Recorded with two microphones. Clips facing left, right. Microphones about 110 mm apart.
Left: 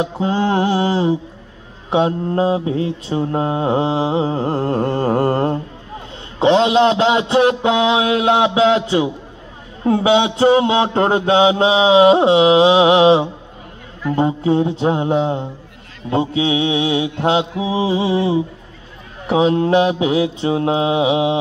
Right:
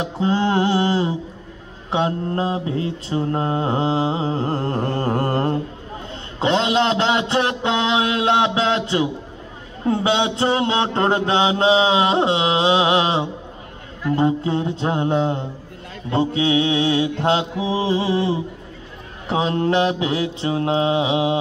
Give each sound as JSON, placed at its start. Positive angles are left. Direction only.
{"t": 0.2, "sound": "mantra", "side_deg": 15}